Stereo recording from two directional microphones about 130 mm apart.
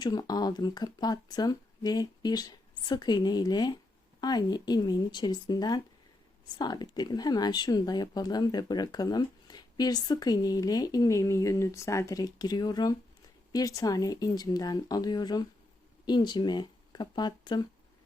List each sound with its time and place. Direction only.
0.0 s speech: 30° left (ahead or behind)